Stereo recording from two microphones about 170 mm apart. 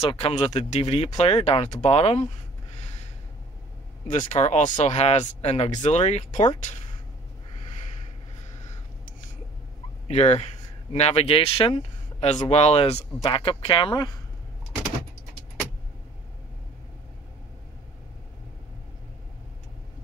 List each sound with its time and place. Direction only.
0.0 s speech: 35° left (ahead or behind)
4.3 s speech: 45° left (ahead or behind)
10.0 s speech: 40° left (ahead or behind)